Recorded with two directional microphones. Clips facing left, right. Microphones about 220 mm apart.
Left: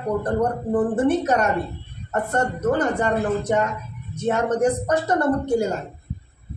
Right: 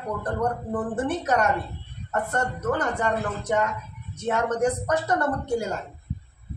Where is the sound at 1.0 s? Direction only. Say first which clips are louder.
Left 4 dB; 25° left (ahead or behind).